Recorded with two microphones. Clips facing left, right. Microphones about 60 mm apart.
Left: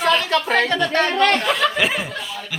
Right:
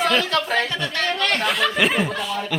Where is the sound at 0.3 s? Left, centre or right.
Left.